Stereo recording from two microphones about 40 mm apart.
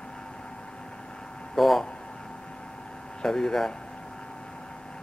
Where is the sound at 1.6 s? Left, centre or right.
Centre.